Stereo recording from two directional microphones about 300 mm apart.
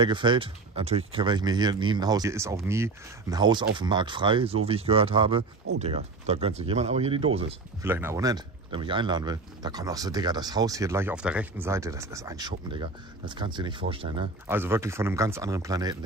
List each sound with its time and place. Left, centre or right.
0.0 s speech: centre
7.8 s speech: centre